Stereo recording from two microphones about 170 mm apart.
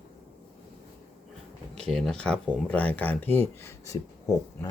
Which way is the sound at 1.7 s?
5° left (ahead or behind).